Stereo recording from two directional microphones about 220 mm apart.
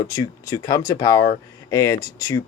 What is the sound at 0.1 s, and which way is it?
Speech, 15° left (ahead or behind).